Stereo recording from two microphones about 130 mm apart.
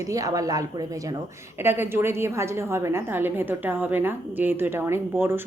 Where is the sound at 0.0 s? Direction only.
25° right (ahead or behind).